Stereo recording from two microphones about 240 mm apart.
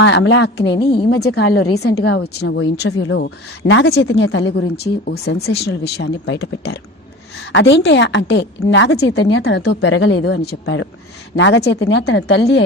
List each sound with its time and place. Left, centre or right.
0.0 s a woman's voice: left
9.6 s a woman's voice: left